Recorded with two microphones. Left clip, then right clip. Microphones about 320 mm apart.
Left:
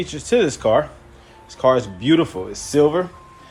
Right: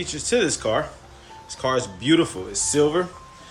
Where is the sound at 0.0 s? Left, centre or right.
Centre.